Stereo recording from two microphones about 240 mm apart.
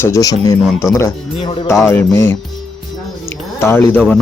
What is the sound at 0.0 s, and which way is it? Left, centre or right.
Speech, centre.